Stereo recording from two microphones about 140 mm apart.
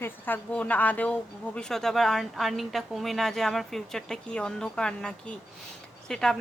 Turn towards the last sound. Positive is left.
turn(degrees=5)  # may be behind; listen again after turning